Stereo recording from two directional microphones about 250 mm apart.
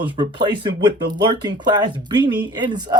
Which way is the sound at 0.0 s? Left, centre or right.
Centre.